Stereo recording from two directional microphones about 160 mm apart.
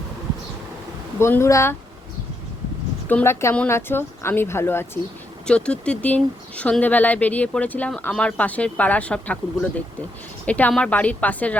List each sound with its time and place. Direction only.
1.2 s speech: 15° left (ahead or behind)
3.1 s speech: 15° left (ahead or behind)